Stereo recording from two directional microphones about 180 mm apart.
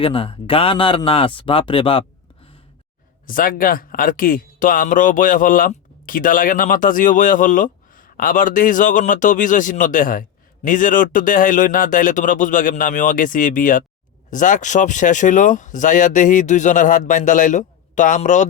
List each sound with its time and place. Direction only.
0.0 s speech: 30° left (ahead or behind)
3.2 s speech: 50° left (ahead or behind)